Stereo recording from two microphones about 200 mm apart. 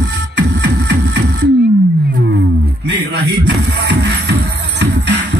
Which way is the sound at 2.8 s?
60° right (ahead or behind).